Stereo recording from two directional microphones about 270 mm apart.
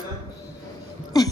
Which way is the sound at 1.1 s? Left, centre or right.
Centre.